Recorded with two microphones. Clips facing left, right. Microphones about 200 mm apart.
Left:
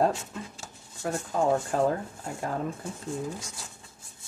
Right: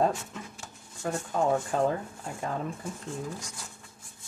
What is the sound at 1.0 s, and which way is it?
Speech, centre (ahead or behind).